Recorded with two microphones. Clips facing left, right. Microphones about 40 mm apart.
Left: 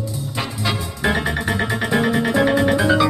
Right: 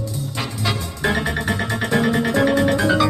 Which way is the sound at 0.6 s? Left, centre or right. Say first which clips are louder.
Left 1 dB; centre.